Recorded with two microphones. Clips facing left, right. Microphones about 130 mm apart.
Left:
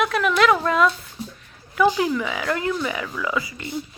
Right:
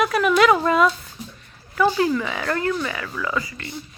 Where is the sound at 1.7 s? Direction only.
15° left (ahead or behind).